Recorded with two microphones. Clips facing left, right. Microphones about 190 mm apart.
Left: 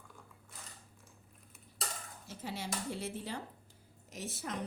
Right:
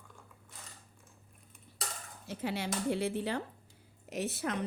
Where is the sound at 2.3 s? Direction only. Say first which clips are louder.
Right 6 dB; 65° right (ahead or behind).